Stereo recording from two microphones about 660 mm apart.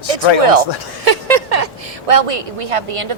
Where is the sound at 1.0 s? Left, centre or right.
Right.